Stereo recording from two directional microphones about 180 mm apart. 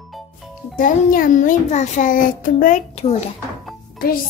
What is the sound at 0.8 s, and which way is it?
Child singing, 50° left (ahead or behind).